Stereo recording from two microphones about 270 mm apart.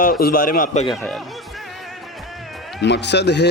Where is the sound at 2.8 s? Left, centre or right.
Left.